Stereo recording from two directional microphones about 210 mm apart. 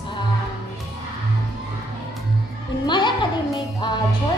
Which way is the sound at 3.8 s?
20° left (ahead or behind).